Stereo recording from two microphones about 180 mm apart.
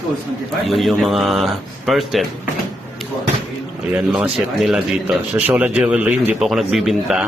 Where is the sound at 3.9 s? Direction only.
5° right (ahead or behind).